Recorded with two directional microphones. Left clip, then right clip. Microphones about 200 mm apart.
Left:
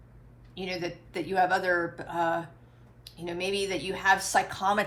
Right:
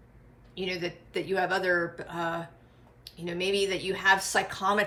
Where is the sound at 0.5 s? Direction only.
20° left (ahead or behind).